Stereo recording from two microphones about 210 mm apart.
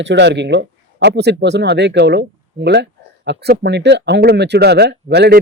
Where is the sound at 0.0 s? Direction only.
55° right (ahead or behind).